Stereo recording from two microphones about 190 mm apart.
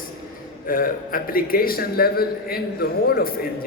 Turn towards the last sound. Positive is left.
turn(degrees=55)  # may be behind; listen again after turning